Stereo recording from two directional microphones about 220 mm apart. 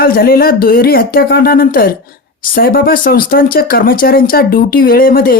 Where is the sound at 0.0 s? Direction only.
40° left (ahead or behind).